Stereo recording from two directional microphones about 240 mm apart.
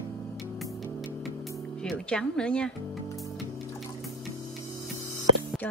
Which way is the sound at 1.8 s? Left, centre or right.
Centre.